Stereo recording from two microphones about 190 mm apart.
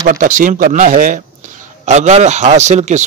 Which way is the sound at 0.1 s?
45° right (ahead or behind).